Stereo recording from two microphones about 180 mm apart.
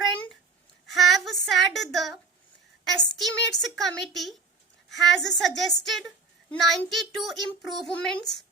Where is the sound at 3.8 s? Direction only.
Centre (ahead or behind).